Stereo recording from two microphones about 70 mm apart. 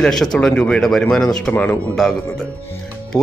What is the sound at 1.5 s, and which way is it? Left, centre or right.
Speech, left.